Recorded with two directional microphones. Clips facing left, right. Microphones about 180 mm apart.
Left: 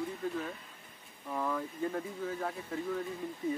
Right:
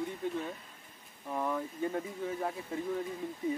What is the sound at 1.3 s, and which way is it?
Speech, 15° right (ahead or behind).